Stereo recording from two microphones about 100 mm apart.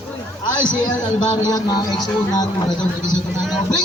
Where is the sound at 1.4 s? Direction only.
40° left (ahead or behind).